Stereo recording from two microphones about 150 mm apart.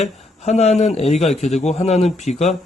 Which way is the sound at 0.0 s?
45° left (ahead or behind).